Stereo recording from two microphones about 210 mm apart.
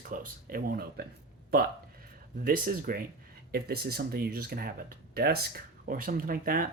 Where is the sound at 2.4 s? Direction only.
45° right (ahead or behind).